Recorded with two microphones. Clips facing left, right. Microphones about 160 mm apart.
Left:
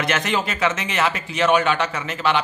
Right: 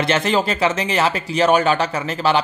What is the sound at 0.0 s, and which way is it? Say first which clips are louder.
Speech: right 4 dB; 30° right (ahead or behind).